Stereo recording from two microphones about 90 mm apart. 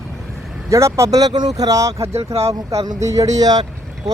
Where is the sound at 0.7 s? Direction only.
35° right (ahead or behind).